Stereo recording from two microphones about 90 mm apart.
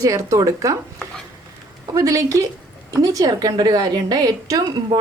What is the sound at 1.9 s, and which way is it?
A woman's voice, 35° right (ahead or behind).